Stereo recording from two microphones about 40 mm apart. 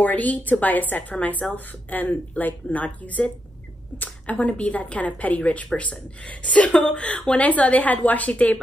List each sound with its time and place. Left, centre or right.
0.0 s a woman's voice: left